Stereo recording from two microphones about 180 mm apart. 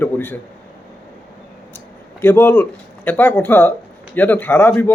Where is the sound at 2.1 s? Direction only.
10° left (ahead or behind).